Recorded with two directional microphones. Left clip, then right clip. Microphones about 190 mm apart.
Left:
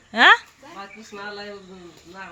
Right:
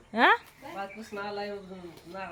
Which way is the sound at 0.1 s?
Centre (ahead or behind).